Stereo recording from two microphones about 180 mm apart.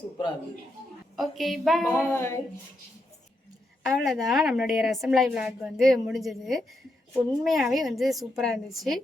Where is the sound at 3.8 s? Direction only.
Centre (ahead or behind).